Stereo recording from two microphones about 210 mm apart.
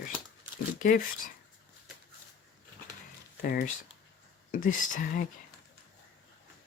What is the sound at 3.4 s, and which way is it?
Speech, 45° left (ahead or behind).